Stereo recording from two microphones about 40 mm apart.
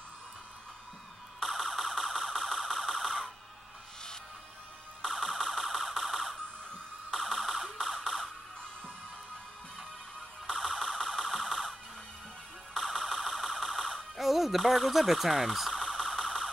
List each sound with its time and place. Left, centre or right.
1.4 s car alarm: centre
5.0 s music: centre
6.3 s dental drill: centre
7.2 s music: centre
10.5 s music: centre
12.7 s music: centre
14.1 s a sound: centre
15.8 s car alarm: centre